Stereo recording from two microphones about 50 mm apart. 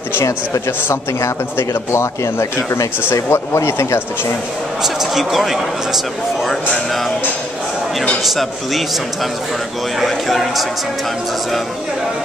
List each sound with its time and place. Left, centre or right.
1.7 s speech: left
3.0 s speech: left
3.5 s speech: left
4.8 s speech: centre
8.2 s speech: centre
9.9 s speech: centre